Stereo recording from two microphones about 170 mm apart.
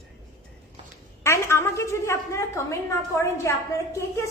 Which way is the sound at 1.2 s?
15° left (ahead or behind).